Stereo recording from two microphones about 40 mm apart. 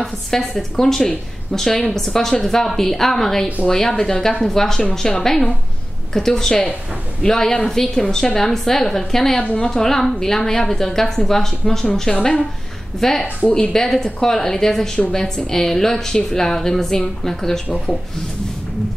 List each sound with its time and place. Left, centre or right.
0.0 s a woman's voice: centre
17.6 s speech: left